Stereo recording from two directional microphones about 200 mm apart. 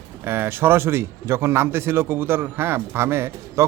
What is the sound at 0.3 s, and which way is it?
A man's voice, 10° right (ahead or behind).